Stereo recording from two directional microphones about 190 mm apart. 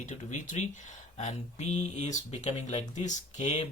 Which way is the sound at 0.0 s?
40° left (ahead or behind).